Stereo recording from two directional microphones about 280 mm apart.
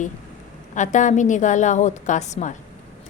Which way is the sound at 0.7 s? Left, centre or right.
Left.